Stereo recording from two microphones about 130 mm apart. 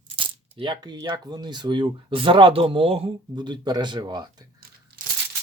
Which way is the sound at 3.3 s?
35° right (ahead or behind).